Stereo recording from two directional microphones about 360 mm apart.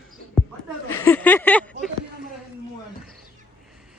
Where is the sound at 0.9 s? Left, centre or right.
Centre.